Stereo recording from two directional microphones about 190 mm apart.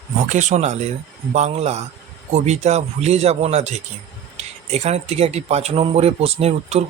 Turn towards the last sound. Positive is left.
turn(degrees=-35)  # may be behind; listen again after turning